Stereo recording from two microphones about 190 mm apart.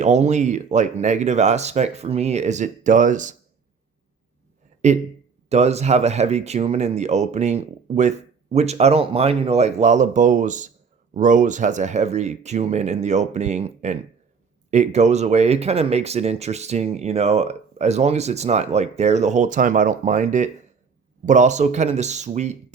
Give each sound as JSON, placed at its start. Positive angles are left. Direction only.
{"t": 0.0, "sound": "speech", "side_deg": -35}
{"t": 4.8, "sound": "speech", "side_deg": -40}